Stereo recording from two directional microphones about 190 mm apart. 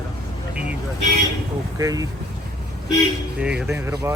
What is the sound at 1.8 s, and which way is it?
Speech, 20° right (ahead or behind).